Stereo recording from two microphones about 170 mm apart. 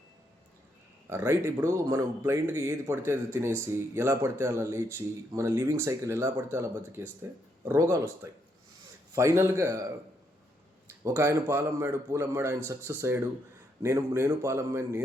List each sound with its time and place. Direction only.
1.1 s speech: 15° right (ahead or behind)
10.8 s speech: 15° right (ahead or behind)